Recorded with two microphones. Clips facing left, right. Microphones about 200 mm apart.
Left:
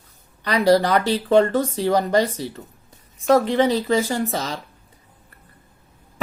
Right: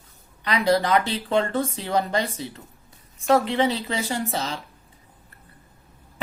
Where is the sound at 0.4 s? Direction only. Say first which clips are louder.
Left 4 dB; 40° left (ahead or behind).